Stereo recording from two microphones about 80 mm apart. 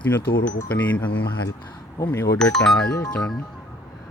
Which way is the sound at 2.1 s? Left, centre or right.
Left.